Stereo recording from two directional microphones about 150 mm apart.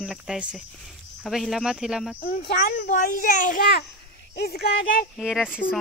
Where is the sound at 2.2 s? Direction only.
65° left (ahead or behind); by 3.8 s 80° left.